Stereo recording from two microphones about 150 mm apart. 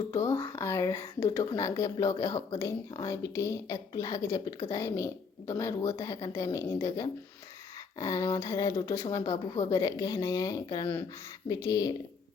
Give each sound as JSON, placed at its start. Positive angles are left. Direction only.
{"t": 0.1, "sound": "speech", "side_deg": 20}